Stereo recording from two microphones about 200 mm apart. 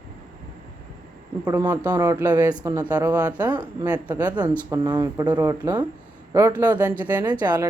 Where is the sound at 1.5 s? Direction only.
15° right (ahead or behind).